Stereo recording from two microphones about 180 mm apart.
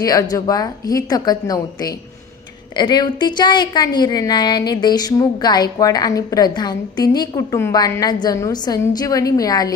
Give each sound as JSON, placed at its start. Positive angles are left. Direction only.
{"t": 0.0, "sound": "a woman's voice", "side_deg": 20}